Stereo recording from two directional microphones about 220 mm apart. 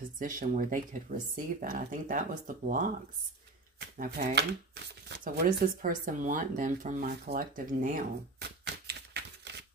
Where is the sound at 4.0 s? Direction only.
35° right (ahead or behind).